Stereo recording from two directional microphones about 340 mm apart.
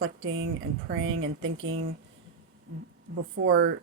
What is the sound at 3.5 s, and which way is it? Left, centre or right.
Speech, right.